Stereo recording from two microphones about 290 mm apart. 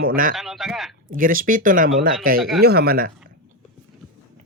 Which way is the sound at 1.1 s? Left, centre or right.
Right.